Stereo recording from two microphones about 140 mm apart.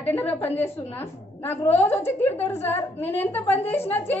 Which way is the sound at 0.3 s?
15° left (ahead or behind).